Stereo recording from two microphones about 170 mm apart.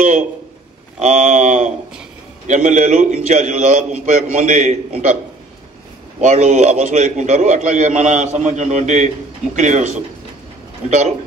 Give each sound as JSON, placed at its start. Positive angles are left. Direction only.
{"t": 1.0, "sound": "a man's voice", "side_deg": -45}
{"t": 6.2, "sound": "a man's voice", "side_deg": -45}